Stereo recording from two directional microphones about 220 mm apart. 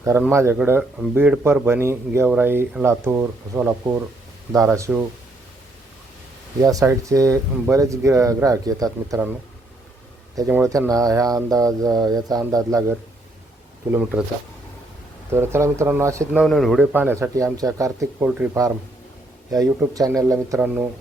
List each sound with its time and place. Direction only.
0.0 s speech: 10° right (ahead or behind)
6.6 s speech: 15° right (ahead or behind)
10.3 s speech: 15° right (ahead or behind)
15.3 s speech: 10° right (ahead or behind)
16.4 s speech: centre (ahead or behind)
19.8 s speech: 15° right (ahead or behind)